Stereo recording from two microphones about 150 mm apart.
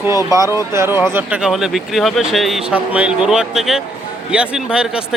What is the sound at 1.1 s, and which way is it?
Speech, 5° right (ahead or behind).